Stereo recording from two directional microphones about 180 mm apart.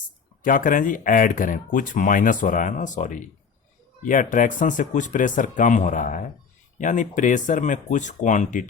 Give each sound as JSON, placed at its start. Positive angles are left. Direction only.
{"t": 0.4, "sound": "speech", "side_deg": 50}